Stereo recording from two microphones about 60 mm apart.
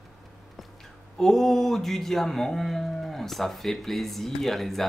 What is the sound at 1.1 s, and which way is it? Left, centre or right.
Speech, centre.